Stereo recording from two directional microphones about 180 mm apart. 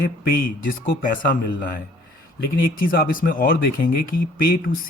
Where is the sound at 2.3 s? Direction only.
55° left (ahead or behind).